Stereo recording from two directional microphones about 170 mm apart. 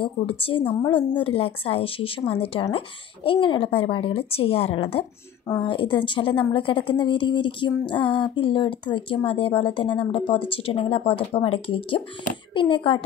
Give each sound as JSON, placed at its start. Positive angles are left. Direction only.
{"t": 0.0, "sound": "a woman's voice", "side_deg": 35}